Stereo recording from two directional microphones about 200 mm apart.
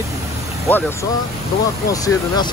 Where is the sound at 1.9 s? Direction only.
15° left (ahead or behind).